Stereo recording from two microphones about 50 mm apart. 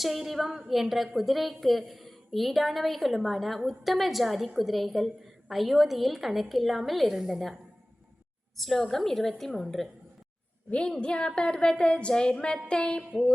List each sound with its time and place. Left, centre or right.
0.0 s a woman's voice: centre
10.7 s a woman's voice: centre
12.6 s a sound: centre